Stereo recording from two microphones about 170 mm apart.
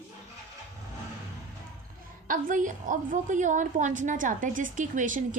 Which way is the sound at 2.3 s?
50° right (ahead or behind).